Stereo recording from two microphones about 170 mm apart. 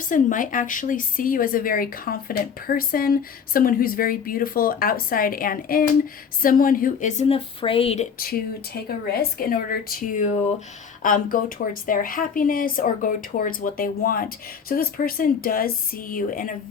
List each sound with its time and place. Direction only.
0.0 s a woman's voice: 50° left (ahead or behind); by 8.0 s 35° left (ahead or behind)
8.2 s a woman's voice: 65° left (ahead or behind)